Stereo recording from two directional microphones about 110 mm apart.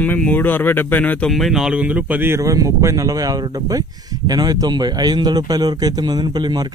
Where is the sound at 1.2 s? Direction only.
Centre (ahead or behind).